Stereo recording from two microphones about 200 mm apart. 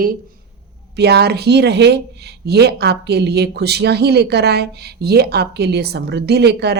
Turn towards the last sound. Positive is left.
turn(degrees=-55)  # may be behind; listen again after turning